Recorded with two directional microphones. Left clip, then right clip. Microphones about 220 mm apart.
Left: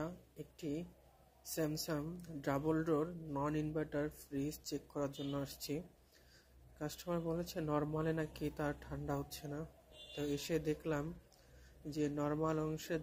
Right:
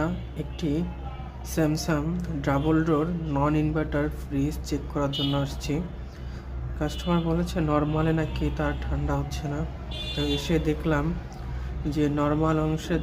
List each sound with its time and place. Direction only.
0.6 s speech: 25° left (ahead or behind)
6.8 s speech: 25° left (ahead or behind)